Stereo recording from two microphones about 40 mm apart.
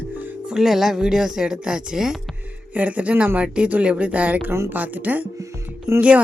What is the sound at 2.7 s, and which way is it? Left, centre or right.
Speech, right.